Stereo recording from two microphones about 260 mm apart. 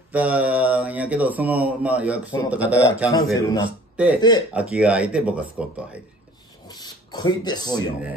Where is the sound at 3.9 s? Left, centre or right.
Centre.